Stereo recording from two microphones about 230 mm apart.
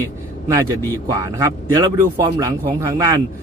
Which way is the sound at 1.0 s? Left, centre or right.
Centre.